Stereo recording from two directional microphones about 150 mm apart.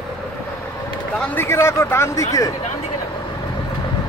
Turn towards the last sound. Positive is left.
turn(degrees=20)  # may be behind; listen again after turning